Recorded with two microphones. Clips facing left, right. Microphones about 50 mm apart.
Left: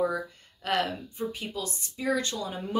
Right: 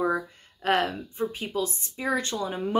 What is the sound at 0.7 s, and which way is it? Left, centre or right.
Speech, right.